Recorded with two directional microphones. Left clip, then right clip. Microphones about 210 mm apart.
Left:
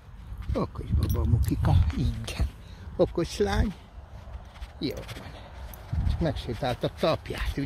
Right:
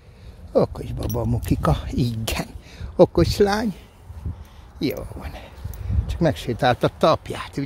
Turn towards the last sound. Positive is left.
turn(degrees=-20)  # may be behind; listen again after turning